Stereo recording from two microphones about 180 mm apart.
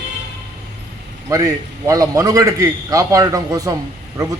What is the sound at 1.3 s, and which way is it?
A man's voice, 20° right (ahead or behind).